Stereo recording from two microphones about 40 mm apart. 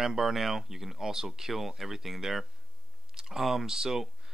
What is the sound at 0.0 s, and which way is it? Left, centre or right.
Speech, centre.